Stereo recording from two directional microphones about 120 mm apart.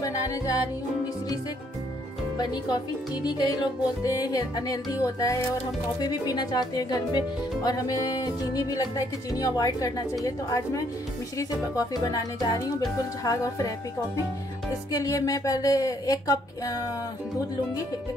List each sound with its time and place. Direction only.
0.0 s music: 30° left (ahead or behind)
2.7 s speech: 35° left (ahead or behind)
14.9 s speech: 30° left (ahead or behind)